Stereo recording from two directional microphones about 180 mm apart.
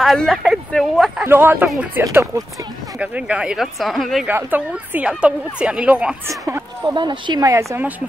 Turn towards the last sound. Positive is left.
turn(degrees=-15)  # may be behind; listen again after turning